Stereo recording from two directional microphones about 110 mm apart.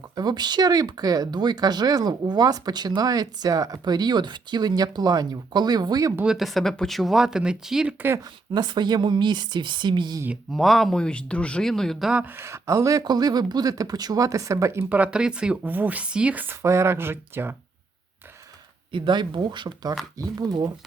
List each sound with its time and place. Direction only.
0.2 s speech: 40° right (ahead or behind)
6.2 s speech: centre (ahead or behind)
8.5 s speech: 40° right (ahead or behind)
10.5 s speech: centre (ahead or behind)
12.2 s speech: 25° right (ahead or behind)
18.9 s speech: 50° right (ahead or behind)